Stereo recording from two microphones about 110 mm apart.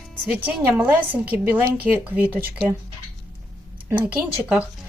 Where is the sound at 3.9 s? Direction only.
15° right (ahead or behind).